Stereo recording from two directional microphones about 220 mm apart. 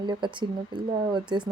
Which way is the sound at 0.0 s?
20° right (ahead or behind).